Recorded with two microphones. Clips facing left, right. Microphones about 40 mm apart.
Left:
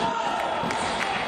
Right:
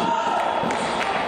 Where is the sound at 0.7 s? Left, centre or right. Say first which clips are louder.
Right 3 dB; right.